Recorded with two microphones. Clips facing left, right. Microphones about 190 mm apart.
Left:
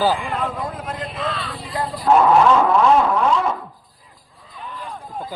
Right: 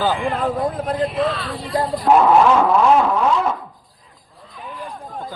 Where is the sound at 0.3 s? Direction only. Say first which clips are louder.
Right 4 dB; 35° right (ahead or behind).